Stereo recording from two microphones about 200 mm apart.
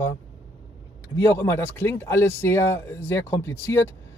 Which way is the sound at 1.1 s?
15° left (ahead or behind).